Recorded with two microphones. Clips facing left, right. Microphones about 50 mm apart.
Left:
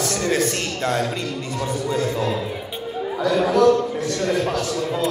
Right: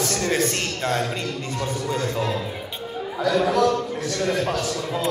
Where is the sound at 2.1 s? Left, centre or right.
Centre.